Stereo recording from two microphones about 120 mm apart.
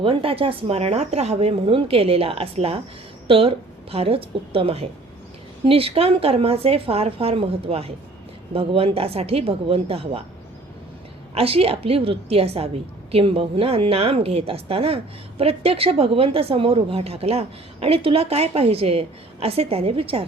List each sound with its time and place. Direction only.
0.0 s a woman's voice: 50° right (ahead or behind)
11.3 s a woman's voice: 55° right (ahead or behind)